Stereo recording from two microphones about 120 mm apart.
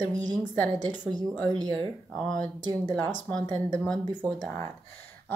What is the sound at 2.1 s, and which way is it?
Speech, 10° left (ahead or behind).